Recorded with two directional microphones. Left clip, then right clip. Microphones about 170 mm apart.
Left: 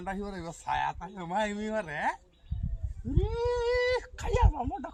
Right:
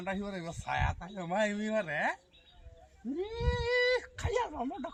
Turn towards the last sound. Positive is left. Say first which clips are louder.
# left 3 dB
turn(degrees=25)  # may be behind; listen again after turning